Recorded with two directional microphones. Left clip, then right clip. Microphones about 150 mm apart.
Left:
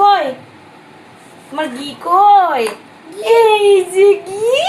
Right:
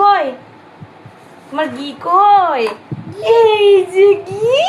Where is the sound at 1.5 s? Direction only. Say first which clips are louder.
Right 2 dB; 25° left (ahead or behind).